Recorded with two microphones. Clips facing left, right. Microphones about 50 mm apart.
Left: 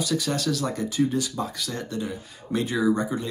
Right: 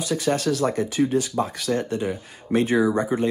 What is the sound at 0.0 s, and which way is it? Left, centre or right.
Speech, right.